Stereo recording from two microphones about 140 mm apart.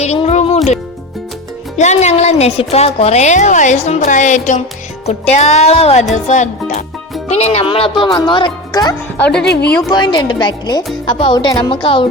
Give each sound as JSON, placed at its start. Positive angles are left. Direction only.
{"t": 0.0, "sound": "music", "side_deg": 50}
{"t": 1.7, "sound": "a woman's voice", "side_deg": 55}
{"t": 5.0, "sound": "music", "side_deg": 50}
{"t": 6.2, "sound": "a woman's voice", "side_deg": 60}
{"t": 9.3, "sound": "speech", "side_deg": 5}
{"t": 9.9, "sound": "speech", "side_deg": 30}